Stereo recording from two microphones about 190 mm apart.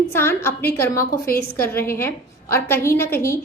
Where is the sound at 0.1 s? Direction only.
10° left (ahead or behind).